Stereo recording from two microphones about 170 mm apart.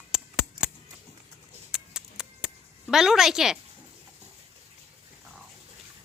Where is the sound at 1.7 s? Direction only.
5° right (ahead or behind).